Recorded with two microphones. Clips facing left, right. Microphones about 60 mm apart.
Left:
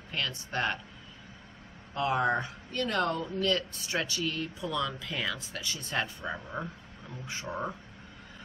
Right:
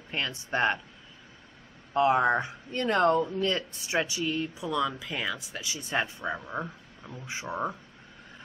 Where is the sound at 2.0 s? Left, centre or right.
Right.